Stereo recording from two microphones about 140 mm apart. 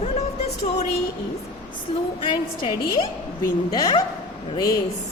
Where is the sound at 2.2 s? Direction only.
40° left (ahead or behind).